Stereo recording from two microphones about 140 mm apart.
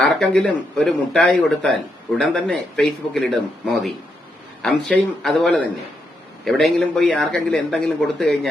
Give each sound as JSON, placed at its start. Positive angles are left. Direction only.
{"t": 0.0, "sound": "speech", "side_deg": 5}
{"t": 4.6, "sound": "speech", "side_deg": 5}